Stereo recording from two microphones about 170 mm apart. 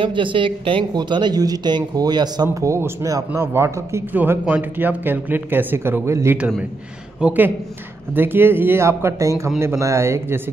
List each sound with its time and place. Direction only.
0.0 s a woman's voice: 30° right (ahead or behind)